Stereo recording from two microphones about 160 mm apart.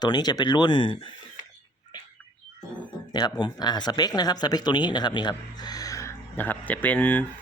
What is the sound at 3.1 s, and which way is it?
Speech, 25° left (ahead or behind).